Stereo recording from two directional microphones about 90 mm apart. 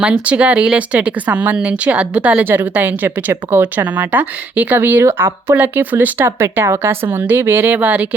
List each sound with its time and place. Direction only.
0.0 s speech: 15° right (ahead or behind)